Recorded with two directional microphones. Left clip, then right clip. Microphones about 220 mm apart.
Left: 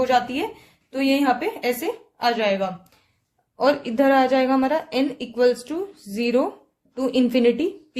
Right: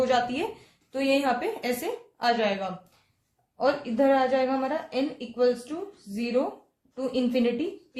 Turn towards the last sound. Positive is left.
turn(degrees=50)  # may be behind; listen again after turning